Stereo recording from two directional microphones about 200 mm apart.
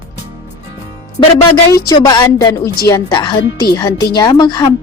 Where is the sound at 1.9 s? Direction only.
20° left (ahead or behind).